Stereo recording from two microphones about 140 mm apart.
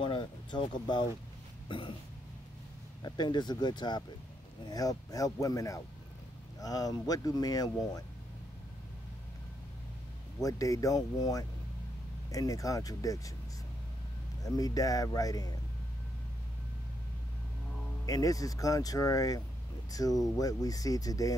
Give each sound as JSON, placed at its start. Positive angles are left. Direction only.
{"t": 0.0, "sound": "speech", "side_deg": 35}
{"t": 3.0, "sound": "speech", "side_deg": 30}
{"t": 10.4, "sound": "speech", "side_deg": 25}
{"t": 14.4, "sound": "speech", "side_deg": 25}
{"t": 18.0, "sound": "speech", "side_deg": 25}